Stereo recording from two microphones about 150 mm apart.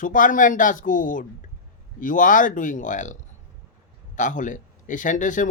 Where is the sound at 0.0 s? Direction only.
60° left (ahead or behind).